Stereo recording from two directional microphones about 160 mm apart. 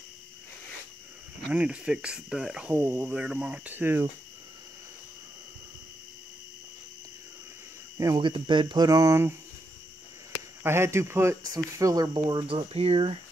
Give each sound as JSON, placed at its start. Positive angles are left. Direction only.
{"t": 1.5, "sound": "cricket", "side_deg": -5}
{"t": 8.0, "sound": "speech", "side_deg": -25}
{"t": 10.6, "sound": "speech", "side_deg": -15}